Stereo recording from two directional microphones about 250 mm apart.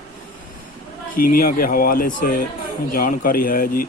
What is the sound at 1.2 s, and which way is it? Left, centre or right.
Speech, left.